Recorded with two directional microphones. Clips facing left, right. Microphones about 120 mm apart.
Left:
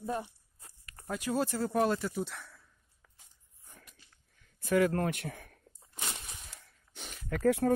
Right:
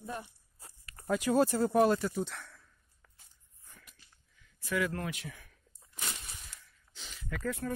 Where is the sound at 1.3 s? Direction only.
90° right.